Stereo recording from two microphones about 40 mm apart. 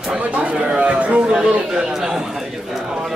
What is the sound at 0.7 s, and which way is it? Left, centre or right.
Speech, right.